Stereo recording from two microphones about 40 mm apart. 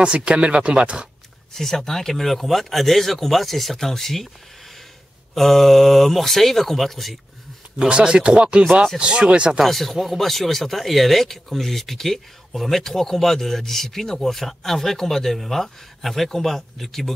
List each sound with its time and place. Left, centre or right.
0.0 s speech: right
1.5 s speech: centre
5.3 s speech: centre
7.9 s speech: right
9.7 s speech: centre